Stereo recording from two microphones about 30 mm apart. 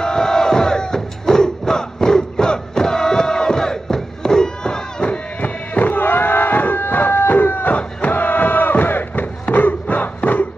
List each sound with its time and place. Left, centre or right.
0.0 s crowd: left
5.4 s a sound: left
8.1 s battle cry: left